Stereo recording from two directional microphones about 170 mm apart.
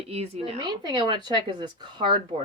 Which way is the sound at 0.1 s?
35° right (ahead or behind).